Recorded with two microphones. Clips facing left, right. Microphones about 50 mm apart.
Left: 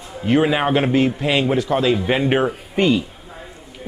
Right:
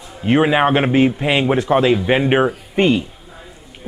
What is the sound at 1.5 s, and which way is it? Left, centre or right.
Speech, right.